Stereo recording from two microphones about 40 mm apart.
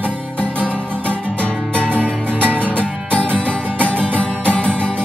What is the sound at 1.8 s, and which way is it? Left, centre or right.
Music, right.